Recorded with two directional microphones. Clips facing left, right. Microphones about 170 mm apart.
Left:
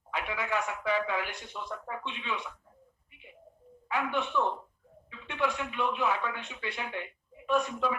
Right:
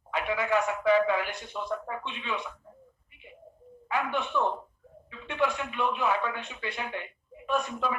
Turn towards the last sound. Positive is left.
turn(degrees=-45)  # may be behind; listen again after turning